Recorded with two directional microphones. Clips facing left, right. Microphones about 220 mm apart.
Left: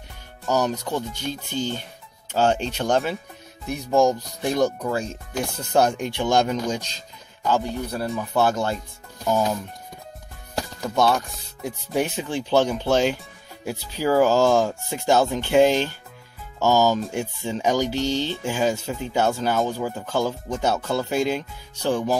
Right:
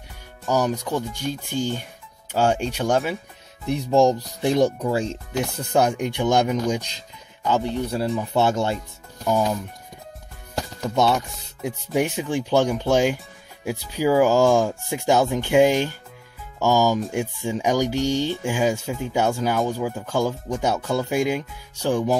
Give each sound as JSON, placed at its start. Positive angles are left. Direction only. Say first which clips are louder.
{"t": 0.5, "sound": "music", "louder": "right 1 dB", "side_deg": -10}
{"t": 3.6, "sound": "speech", "louder": "right 2 dB", "side_deg": -25}
{"t": 5.8, "sound": "music", "louder": "even", "side_deg": -15}
{"t": 7.4, "sound": "speech", "louder": "right 1 dB", "side_deg": -20}
{"t": 9.3, "sound": "speech", "louder": "right 1 dB", "side_deg": 5}
{"t": 11.6, "sound": "music", "louder": "right 2 dB", "side_deg": -15}